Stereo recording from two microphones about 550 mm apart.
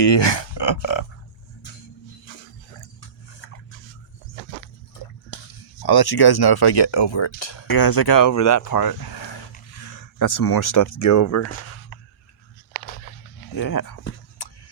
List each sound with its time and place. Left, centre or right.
0.0 s speech: left
2.3 s dog: centre
5.8 s speech: left
7.7 s speech: left
10.2 s speech: left
13.5 s speech: left
14.4 s a sound: left